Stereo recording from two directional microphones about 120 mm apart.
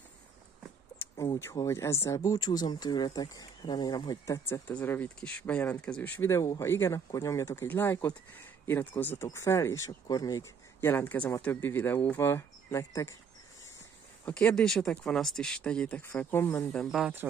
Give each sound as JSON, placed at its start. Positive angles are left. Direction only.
{"t": 0.9, "sound": "a sound", "side_deg": 20}
{"t": 1.4, "sound": "speech", "side_deg": 25}
{"t": 4.5, "sound": "speech", "side_deg": 15}
{"t": 10.8, "sound": "speech", "side_deg": 15}
{"t": 14.2, "sound": "speech", "side_deg": 10}
{"t": 16.7, "sound": "speech", "side_deg": 0}